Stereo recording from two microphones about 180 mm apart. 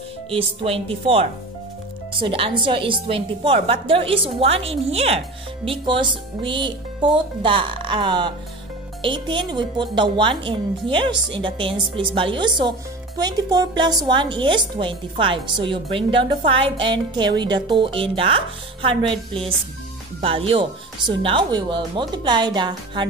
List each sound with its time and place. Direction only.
0.3 s a woman's voice: 30° right (ahead or behind)